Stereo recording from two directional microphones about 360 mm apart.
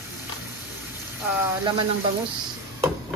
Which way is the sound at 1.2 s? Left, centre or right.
Centre.